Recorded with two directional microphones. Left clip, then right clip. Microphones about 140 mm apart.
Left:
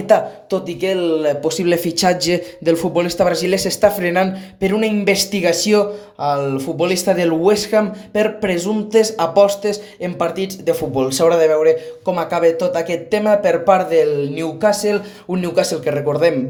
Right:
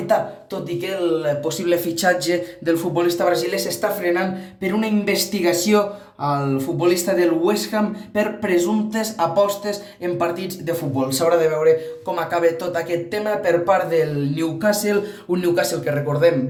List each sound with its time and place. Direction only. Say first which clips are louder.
0.8 s speech: left 3 dB; 35° left (ahead or behind)